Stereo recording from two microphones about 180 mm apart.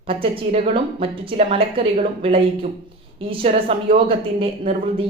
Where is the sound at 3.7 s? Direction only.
30° right (ahead or behind).